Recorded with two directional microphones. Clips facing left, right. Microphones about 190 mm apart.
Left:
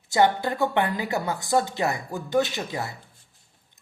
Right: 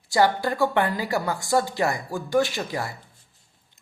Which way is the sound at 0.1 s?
20° left (ahead or behind).